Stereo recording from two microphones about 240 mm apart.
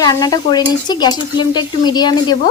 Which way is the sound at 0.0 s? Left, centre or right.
Centre.